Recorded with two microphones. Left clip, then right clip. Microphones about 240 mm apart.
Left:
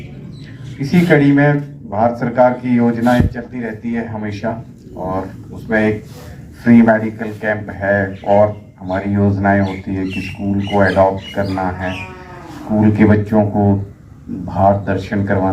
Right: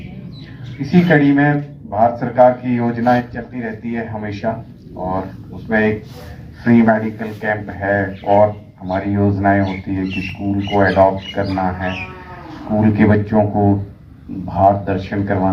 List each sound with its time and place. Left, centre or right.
0.8 s a man's voice: left
5.6 s a man's voice: left